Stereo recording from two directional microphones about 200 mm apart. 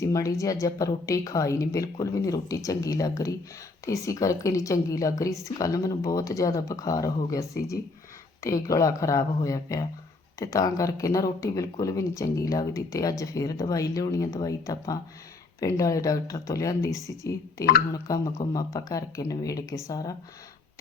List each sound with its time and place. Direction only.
0.0 s speech: 15° left (ahead or behind)
8.4 s speech: 15° left (ahead or behind)